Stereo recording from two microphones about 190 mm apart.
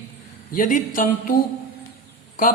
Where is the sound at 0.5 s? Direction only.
45° left (ahead or behind).